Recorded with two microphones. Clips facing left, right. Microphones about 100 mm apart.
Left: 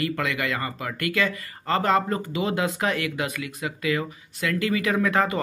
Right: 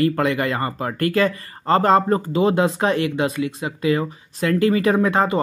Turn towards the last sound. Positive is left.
turn(degrees=-25)  # may be behind; listen again after turning